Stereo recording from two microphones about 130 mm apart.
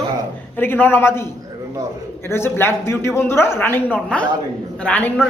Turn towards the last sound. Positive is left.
turn(degrees=10)  # may be behind; listen again after turning